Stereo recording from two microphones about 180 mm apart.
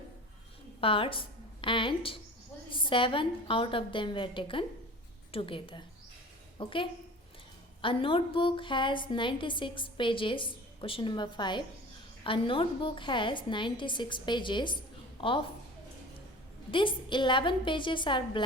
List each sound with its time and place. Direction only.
0.8 s a woman's voice: 30° left (ahead or behind)
16.7 s a woman's voice: 25° left (ahead or behind)